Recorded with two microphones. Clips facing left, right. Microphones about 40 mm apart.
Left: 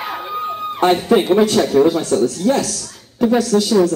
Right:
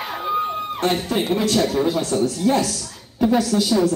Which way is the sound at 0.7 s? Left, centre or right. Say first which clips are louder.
Left 8 dB; left.